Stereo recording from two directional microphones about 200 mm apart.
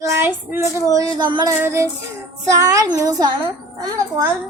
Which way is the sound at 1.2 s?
20° right (ahead or behind).